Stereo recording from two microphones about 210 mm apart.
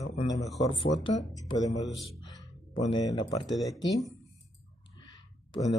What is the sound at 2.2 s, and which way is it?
Music, 20° left (ahead or behind).